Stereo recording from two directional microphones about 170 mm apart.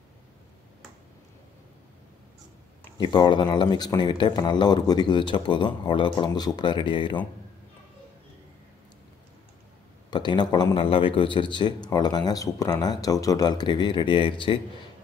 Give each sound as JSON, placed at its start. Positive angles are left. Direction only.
{"t": 3.0, "sound": "a man's voice", "side_deg": 25}
{"t": 10.1, "sound": "a man's voice", "side_deg": 25}